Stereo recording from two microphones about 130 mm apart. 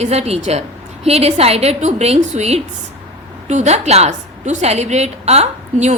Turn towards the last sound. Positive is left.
turn(degrees=-60)  # may be behind; listen again after turning